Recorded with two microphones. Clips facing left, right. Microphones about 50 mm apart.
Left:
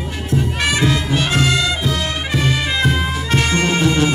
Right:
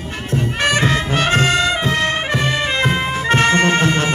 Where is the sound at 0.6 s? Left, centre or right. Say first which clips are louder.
Right 3 dB; right.